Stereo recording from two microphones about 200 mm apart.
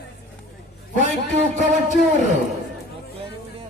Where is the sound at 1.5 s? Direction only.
35° right (ahead or behind).